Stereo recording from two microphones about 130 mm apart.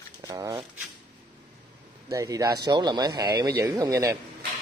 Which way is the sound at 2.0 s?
25° right (ahead or behind).